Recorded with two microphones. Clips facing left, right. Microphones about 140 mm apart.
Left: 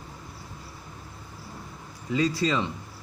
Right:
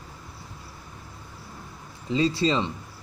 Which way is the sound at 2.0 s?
25° right (ahead or behind).